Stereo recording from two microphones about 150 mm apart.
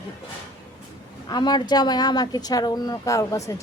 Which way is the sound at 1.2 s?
30° left (ahead or behind).